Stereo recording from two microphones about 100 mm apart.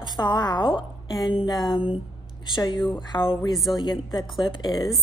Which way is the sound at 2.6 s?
50° left (ahead or behind).